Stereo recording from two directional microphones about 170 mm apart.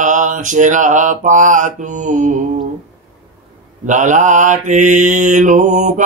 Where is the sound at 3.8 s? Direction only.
45° right (ahead or behind).